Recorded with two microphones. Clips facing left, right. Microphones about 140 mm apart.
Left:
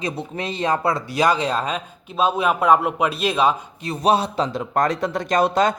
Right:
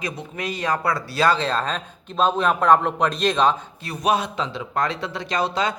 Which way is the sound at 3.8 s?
25° left (ahead or behind).